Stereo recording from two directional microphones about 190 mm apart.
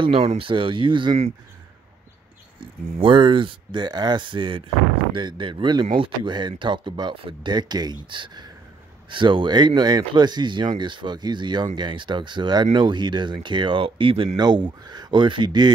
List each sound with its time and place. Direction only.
0.0 s speech: 30° right (ahead or behind)
2.6 s speech: 25° right (ahead or behind)